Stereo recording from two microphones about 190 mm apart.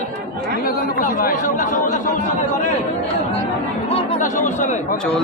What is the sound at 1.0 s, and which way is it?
Chatter, 45° left (ahead or behind).